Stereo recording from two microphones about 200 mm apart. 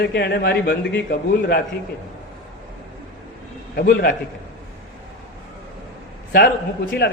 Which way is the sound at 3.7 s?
50° left (ahead or behind).